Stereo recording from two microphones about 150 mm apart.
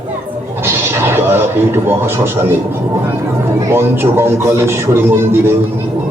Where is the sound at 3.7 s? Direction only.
15° right (ahead or behind).